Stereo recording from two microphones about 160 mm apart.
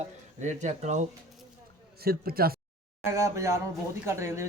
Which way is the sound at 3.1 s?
20° right (ahead or behind).